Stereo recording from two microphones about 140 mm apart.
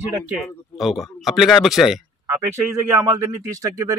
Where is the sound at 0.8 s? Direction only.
Centre (ahead or behind).